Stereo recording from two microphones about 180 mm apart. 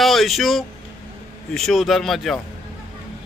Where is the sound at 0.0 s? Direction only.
Centre (ahead or behind).